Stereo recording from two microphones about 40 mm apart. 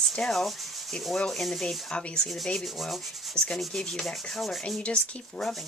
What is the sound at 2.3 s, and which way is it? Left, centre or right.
Rub, centre.